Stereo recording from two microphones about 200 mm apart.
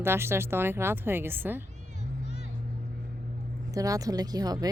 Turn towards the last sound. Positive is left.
turn(degrees=-20)  # may be behind; listen again after turning